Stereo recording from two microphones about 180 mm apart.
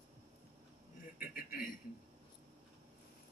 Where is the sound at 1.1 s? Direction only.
50° left (ahead or behind).